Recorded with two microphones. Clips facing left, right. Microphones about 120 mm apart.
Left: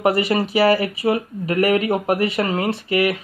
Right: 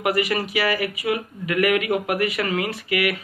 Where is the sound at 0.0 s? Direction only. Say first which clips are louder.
Left 4 dB; 30° left (ahead or behind).